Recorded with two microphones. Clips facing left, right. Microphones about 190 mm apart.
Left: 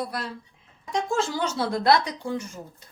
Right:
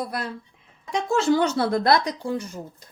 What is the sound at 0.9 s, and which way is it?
Speech, 65° right (ahead or behind).